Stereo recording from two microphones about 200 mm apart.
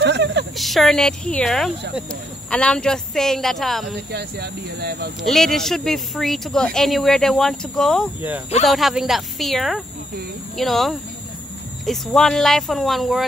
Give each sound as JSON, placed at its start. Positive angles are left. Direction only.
{"t": 0.0, "sound": "a sound", "side_deg": -60}
{"t": 0.6, "sound": "speech", "side_deg": 0}
{"t": 4.1, "sound": "speech", "side_deg": -55}
{"t": 5.2, "sound": "speech", "side_deg": 0}